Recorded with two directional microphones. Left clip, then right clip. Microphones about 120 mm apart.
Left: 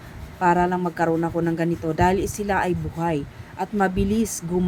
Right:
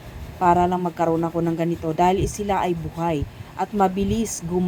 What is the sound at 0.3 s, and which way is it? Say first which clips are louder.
Speech: right 2 dB; 10° left (ahead or behind).